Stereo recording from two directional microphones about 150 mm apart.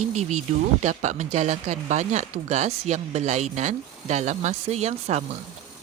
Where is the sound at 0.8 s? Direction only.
50° right (ahead or behind).